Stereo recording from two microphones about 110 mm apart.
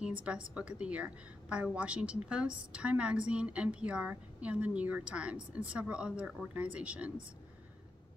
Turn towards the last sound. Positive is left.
turn(degrees=-10)  # may be behind; listen again after turning